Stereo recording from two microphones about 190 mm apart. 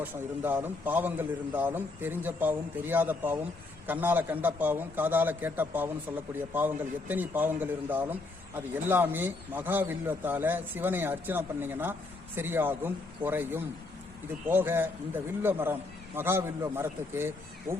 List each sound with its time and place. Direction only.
0.0 s a man's voice: 10° right (ahead or behind)